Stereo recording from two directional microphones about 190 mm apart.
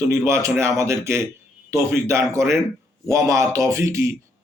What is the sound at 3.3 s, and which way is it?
Speech, 15° right (ahead or behind).